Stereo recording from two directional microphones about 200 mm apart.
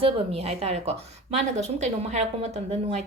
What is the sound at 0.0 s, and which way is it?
Speech, 30° right (ahead or behind).